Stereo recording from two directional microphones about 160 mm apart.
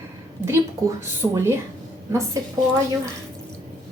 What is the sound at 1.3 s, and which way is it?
Speech, 20° right (ahead or behind).